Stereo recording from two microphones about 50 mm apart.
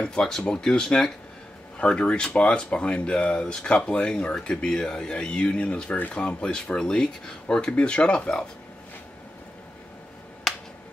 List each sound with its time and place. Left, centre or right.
0.0 s speech: centre
1.8 s speech: left
10.5 s finger snapping: centre